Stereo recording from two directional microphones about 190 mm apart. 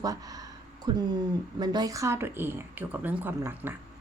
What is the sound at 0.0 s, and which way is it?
Speech, 20° right (ahead or behind).